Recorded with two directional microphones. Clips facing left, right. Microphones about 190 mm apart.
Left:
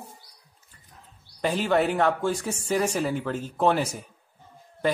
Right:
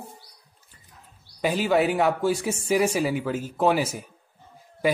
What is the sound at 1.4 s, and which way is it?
Speech, 5° right (ahead or behind).